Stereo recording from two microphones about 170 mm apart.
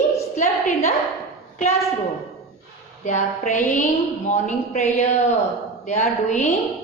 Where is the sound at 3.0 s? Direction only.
45° left (ahead or behind).